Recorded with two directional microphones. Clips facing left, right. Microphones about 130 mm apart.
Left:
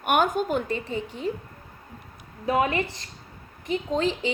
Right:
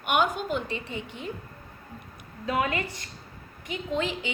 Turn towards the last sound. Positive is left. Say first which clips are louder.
# left 4 dB
turn(degrees=35)  # may be behind; listen again after turning